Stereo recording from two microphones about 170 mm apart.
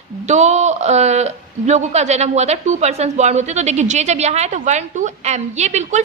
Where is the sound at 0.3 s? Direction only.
45° right (ahead or behind).